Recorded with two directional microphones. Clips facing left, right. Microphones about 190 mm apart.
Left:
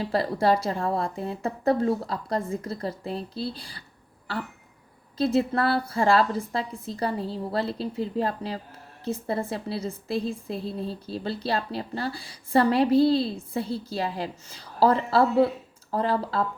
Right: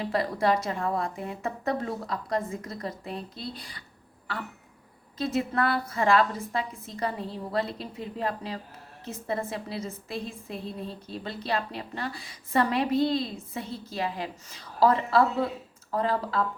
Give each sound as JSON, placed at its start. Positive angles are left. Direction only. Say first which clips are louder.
{"t": 0.0, "sound": "a woman's voice", "louder": "left 2 dB", "side_deg": 30}
{"t": 5.1, "sound": "a woman's voice", "louder": "left 4 dB", "side_deg": 30}